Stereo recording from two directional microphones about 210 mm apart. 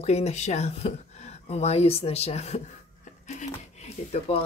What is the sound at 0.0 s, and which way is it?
Speech, 30° left (ahead or behind).